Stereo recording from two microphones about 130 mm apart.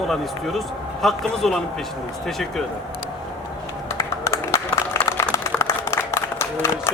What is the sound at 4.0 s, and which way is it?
Clapping, 25° left (ahead or behind).